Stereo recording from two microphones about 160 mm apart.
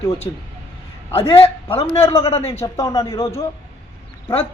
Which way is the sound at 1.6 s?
35° left (ahead or behind).